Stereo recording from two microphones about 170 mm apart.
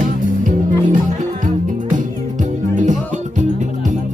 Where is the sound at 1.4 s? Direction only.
50° right (ahead or behind).